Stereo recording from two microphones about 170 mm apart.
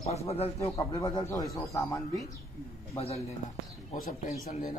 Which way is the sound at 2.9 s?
35° left (ahead or behind).